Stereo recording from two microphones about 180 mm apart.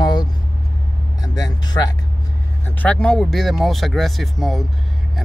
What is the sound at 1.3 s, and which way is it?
Speech, 20° left (ahead or behind).